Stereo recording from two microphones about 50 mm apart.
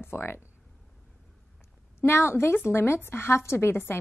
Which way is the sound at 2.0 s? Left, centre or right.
Left.